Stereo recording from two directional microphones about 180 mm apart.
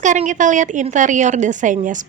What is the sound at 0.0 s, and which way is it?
A woman's voice, 45° right (ahead or behind).